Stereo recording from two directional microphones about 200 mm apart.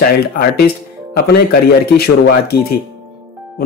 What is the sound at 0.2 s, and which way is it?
Speech, 50° left (ahead or behind).